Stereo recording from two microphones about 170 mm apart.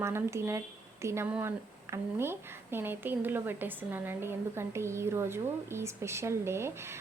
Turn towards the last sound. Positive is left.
turn(degrees=-15)  # may be behind; listen again after turning